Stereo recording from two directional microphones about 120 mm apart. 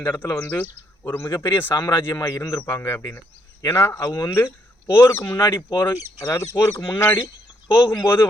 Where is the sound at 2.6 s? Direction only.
15° left (ahead or behind).